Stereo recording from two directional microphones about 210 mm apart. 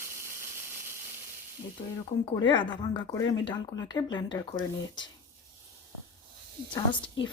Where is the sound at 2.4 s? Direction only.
20° left (ahead or behind).